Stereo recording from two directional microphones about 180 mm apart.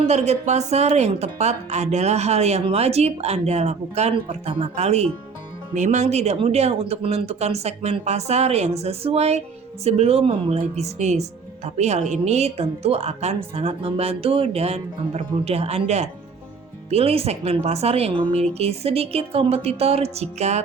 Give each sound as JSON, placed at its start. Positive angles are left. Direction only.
{"t": 0.1, "sound": "speech", "side_deg": -35}